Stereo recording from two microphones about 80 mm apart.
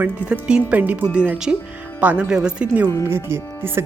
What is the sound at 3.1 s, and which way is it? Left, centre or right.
Speech, right.